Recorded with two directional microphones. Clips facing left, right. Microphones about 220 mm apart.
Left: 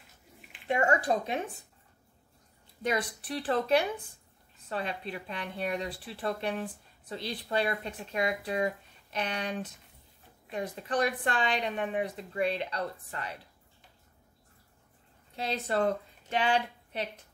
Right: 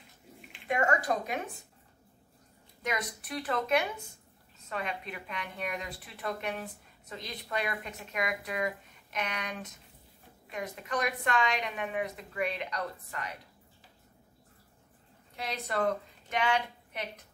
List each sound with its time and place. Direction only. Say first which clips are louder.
0.7 s speech: left 2 dB; 30° left (ahead or behind)
2.8 s speech: left 4 dB; 30° left (ahead or behind)
15.3 s a woman's voice: left 3 dB; 30° left (ahead or behind)